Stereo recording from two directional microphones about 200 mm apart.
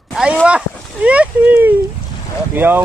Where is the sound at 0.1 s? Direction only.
Centre (ahead or behind).